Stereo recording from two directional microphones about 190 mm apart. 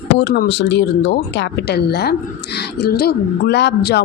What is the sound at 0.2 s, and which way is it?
A woman's voice, 65° left (ahead or behind).